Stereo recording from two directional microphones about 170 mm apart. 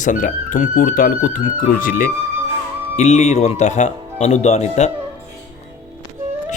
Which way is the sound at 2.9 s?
40° left (ahead or behind).